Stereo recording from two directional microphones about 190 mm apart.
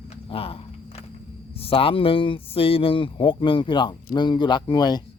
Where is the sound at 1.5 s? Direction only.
30° left (ahead or behind).